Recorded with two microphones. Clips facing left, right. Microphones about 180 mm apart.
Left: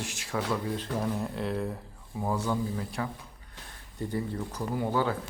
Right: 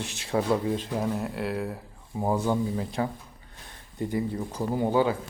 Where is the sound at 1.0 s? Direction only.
5° right (ahead or behind).